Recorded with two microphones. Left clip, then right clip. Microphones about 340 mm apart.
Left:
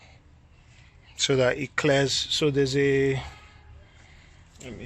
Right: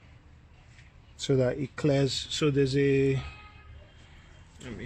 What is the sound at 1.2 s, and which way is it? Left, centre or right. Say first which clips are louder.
Speech: left 5 dB; left.